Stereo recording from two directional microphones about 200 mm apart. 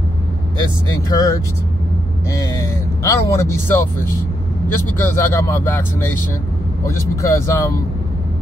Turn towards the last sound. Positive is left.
turn(degrees=15)  # may be behind; listen again after turning